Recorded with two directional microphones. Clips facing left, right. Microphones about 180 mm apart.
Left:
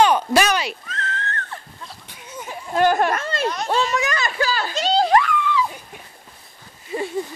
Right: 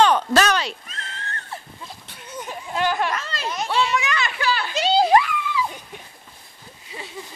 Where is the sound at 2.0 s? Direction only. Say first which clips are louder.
Right 1 dB; 10° left (ahead or behind).